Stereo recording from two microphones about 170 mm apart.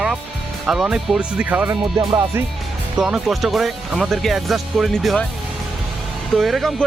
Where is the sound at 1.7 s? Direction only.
25° right (ahead or behind).